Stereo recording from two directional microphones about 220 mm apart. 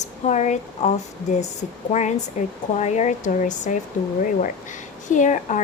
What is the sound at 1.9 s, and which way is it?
Speech, 30° left (ahead or behind).